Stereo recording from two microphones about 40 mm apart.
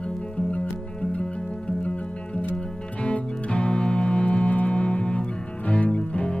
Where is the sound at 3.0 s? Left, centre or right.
Left.